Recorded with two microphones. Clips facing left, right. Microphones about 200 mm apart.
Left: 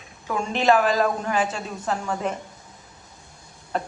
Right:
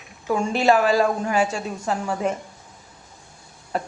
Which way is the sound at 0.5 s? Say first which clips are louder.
Right 1 dB; 10° right (ahead or behind).